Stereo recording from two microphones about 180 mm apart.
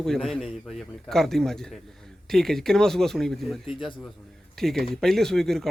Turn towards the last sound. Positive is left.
turn(degrees=0)  # may be behind; listen again after turning